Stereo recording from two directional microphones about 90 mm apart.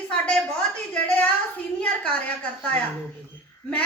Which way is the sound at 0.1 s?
10° left (ahead or behind).